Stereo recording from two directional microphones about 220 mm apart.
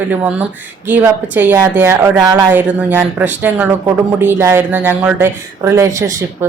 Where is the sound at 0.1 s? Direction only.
5° right (ahead or behind).